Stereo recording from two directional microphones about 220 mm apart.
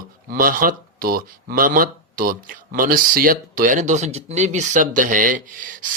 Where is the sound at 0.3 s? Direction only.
40° right (ahead or behind).